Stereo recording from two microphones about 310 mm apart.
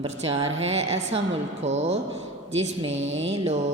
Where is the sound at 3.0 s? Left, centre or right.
Right.